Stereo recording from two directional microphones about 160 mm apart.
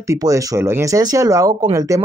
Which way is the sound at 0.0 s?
20° right (ahead or behind).